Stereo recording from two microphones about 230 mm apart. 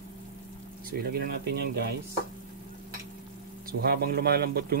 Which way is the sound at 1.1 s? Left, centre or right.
Right.